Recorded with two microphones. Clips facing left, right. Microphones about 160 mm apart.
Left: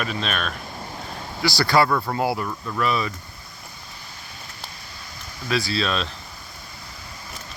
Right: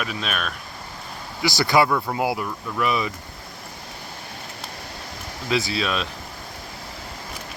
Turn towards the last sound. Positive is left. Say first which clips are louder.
# even
turn(degrees=-10)  # may be behind; listen again after turning